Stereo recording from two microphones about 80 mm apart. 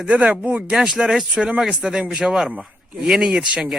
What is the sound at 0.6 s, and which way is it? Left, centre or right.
A man's voice, centre.